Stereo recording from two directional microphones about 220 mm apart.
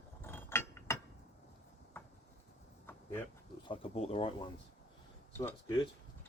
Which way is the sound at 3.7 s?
25° left (ahead or behind).